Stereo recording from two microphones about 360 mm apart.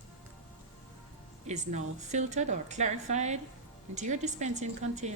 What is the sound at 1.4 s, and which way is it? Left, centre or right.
A woman's voice, centre.